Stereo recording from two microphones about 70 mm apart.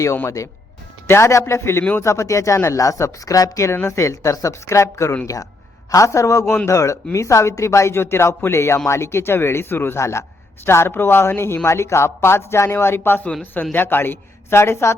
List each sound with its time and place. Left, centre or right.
1.0 s a man's voice: left